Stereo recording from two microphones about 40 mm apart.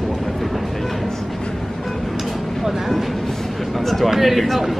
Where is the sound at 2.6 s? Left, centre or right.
Centre.